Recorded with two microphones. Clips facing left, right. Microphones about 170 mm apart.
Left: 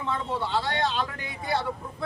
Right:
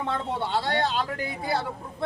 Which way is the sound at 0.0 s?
65° right (ahead or behind).